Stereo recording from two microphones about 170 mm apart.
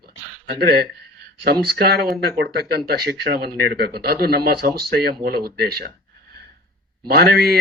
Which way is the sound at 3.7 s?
65° right (ahead or behind).